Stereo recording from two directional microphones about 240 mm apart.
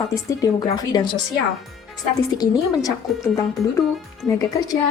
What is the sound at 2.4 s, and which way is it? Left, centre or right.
Speech, centre.